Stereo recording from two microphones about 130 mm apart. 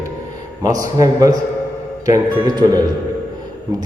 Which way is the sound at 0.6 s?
30° right (ahead or behind).